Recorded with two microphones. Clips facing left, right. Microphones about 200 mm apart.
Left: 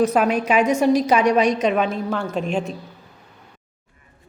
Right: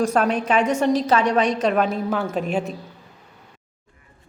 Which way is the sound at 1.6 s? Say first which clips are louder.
Even; centre (ahead or behind).